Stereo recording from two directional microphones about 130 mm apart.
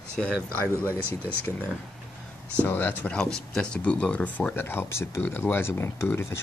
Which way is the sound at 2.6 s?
15° left (ahead or behind).